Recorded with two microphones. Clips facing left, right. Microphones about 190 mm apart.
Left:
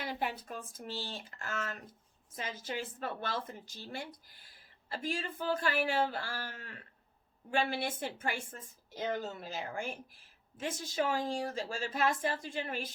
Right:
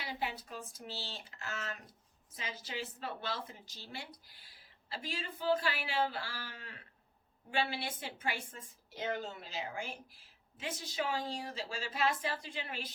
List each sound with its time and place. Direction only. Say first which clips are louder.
0.0 s a woman's voice: left 3 dB; 50° left (ahead or behind)